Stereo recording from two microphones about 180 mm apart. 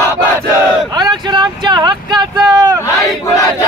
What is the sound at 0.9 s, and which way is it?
Vehicle, 25° right (ahead or behind).